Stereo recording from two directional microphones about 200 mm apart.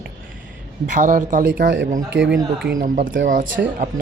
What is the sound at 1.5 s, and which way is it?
Speech, 60° right (ahead or behind).